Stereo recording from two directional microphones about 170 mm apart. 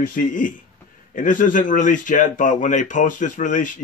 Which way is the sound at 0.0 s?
50° left (ahead or behind).